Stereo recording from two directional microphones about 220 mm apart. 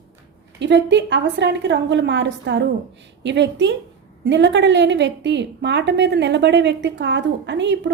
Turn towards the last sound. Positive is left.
turn(degrees=-55)  # may be behind; listen again after turning